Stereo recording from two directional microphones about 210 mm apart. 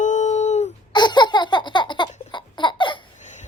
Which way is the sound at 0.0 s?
35° left (ahead or behind).